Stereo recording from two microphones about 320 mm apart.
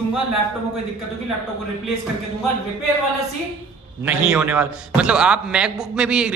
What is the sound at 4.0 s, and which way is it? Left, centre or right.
A man's voice, centre.